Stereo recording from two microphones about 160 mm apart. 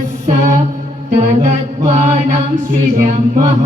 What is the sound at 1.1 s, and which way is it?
Mantra, 45° right (ahead or behind).